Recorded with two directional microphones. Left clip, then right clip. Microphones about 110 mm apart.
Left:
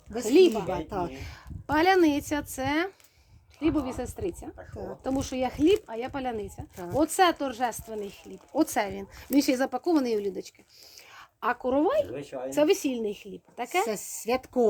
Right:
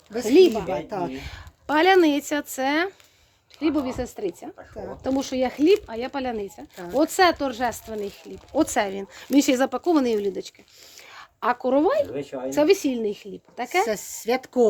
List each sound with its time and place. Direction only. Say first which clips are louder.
0.1 s speech: right 4 dB; 15° right (ahead or behind)
0.5 s speech: right 4 dB; centre (ahead or behind)
0.9 s speech: right 3 dB; 10° right (ahead or behind)
1.1 s speech: right 6 dB; 35° right (ahead or behind)
10.9 s a sound: right 6 dB; 40° right (ahead or behind)
12.1 s speech: right 5 dB; 10° left (ahead or behind)
12.5 s speech: right 4 dB; 30° right (ahead or behind)